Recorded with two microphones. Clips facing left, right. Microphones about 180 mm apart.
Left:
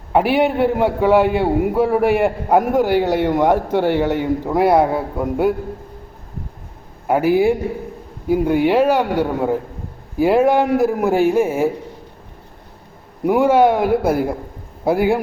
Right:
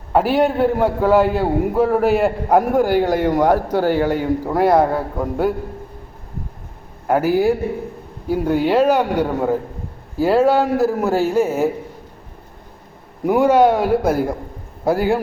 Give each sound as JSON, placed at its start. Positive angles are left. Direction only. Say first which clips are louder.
{"t": 0.1, "sound": "a man's voice", "louder": "even", "side_deg": 10}
{"t": 3.5, "sound": "a man's voice", "louder": "even", "side_deg": -10}
{"t": 4.4, "sound": "a man's voice", "louder": "left 1 dB", "side_deg": 10}
{"t": 7.1, "sound": "a man's voice", "louder": "left 1 dB", "side_deg": 10}
{"t": 13.2, "sound": "a man's voice", "louder": "even", "side_deg": 10}